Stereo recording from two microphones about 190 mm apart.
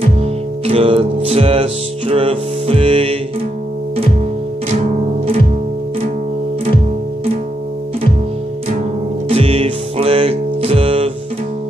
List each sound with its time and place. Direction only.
0.2 s music: 30° right (ahead or behind)
9.3 s music: 30° right (ahead or behind)